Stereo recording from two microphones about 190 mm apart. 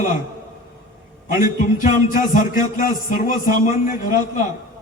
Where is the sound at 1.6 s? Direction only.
45° left (ahead or behind).